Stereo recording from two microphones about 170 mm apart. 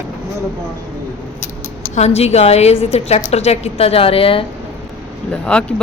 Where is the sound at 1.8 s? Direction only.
40° left (ahead or behind).